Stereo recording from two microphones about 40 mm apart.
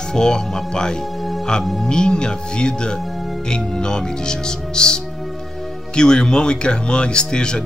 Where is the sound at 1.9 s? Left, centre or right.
Left.